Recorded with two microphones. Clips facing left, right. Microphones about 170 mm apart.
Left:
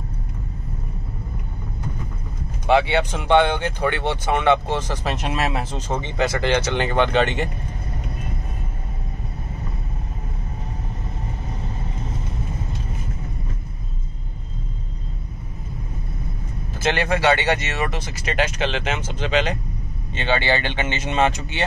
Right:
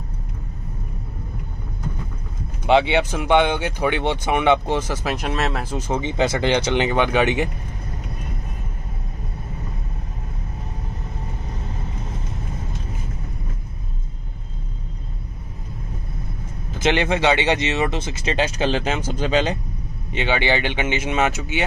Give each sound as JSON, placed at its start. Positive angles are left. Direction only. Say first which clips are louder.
{"t": 2.6, "sound": "speech", "louder": "right 1 dB", "side_deg": -20}
{"t": 5.0, "sound": "speech", "louder": "even", "side_deg": 0}
{"t": 5.8, "sound": "speech", "louder": "right 4 dB", "side_deg": -10}
{"t": 16.7, "sound": "speech", "louder": "right 2 dB", "side_deg": -20}
{"t": 20.1, "sound": "speech", "louder": "right 1 dB", "side_deg": -15}